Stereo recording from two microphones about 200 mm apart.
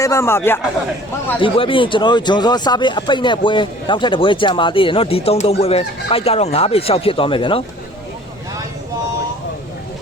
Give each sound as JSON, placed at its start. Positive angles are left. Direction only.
{"t": 0.0, "sound": "speech", "side_deg": 15}
{"t": 1.4, "sound": "speech", "side_deg": 25}